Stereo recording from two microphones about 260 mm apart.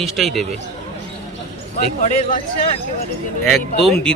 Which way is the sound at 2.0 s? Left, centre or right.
Left.